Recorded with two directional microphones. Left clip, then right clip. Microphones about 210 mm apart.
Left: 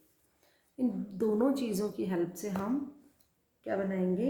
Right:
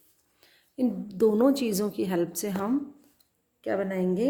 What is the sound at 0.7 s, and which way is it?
A woman's voice, 45° right (ahead or behind).